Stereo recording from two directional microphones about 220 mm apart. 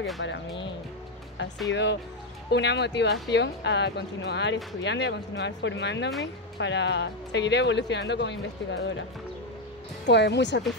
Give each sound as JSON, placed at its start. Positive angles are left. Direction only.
{"t": 0.2, "sound": "speech", "side_deg": 55}
{"t": 1.7, "sound": "speech", "side_deg": 55}
{"t": 10.0, "sound": "speech", "side_deg": 50}